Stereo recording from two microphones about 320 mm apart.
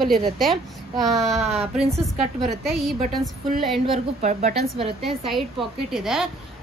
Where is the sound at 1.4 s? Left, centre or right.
Centre.